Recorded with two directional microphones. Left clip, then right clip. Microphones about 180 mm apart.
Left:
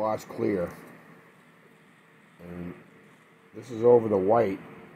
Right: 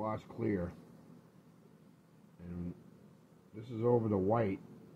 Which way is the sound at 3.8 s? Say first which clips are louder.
Left 12 dB; 15° left (ahead or behind).